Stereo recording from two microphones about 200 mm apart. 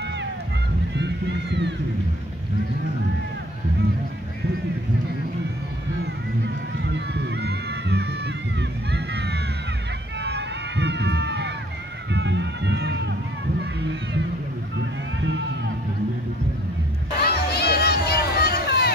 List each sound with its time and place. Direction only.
0.9 s boat: 60° right (ahead or behind)
6.4 s a sound: 60° right (ahead or behind)
10.2 s crowd: 60° right (ahead or behind)
12.1 s music: 60° right (ahead or behind)
14.8 s boat: 65° right (ahead or behind)
17.2 s a sound: 50° left (ahead or behind)